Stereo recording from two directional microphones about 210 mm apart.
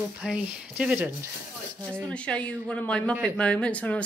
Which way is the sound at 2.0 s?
5° left (ahead or behind).